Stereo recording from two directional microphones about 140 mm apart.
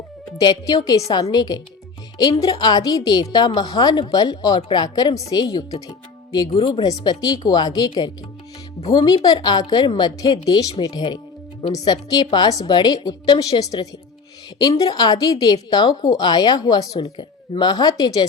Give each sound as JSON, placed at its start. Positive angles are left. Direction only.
{"t": 0.3, "sound": "a woman's voice", "side_deg": 25}